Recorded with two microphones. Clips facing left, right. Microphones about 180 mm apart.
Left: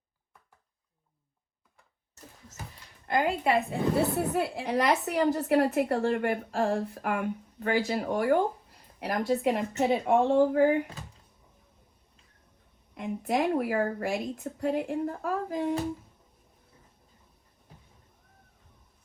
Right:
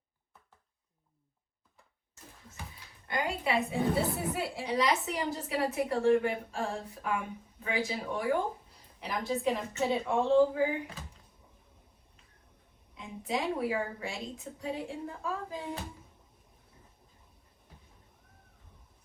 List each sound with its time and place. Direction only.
3.2 s a woman's voice: 50° left (ahead or behind)
12.9 s a woman's voice: 65° left (ahead or behind)